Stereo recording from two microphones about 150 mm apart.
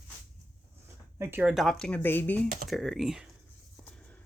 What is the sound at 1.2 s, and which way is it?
Speech, 15° right (ahead or behind).